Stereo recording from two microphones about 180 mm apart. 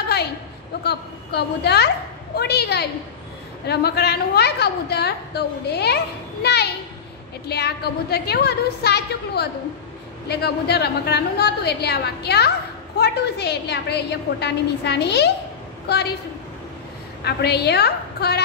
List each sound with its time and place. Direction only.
0.8 s a woman's voice: 65° left (ahead or behind)
17.2 s a woman's voice: 65° left (ahead or behind)